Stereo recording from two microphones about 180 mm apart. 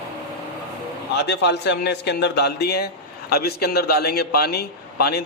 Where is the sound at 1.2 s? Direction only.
70° left (ahead or behind).